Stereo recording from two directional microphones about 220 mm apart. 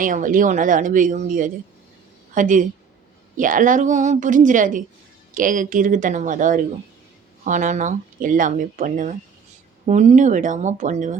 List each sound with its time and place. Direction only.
0.0 s speech: 35° right (ahead or behind)